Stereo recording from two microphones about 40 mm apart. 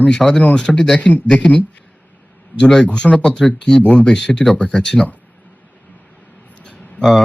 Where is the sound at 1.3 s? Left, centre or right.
Left.